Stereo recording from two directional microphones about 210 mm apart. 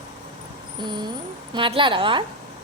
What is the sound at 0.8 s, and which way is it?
A woman's voice, 20° right (ahead or behind).